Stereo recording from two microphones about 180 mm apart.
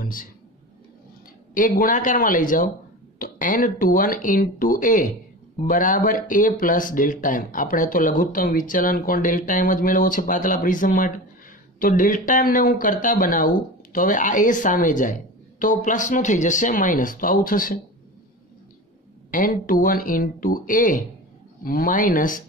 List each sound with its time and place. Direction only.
0.0 s speech: 50° left (ahead or behind)
1.5 s speech: 50° left (ahead or behind)
19.3 s speech: 50° left (ahead or behind)